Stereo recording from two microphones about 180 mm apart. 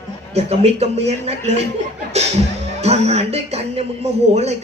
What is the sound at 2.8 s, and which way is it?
Music, 35° right (ahead or behind).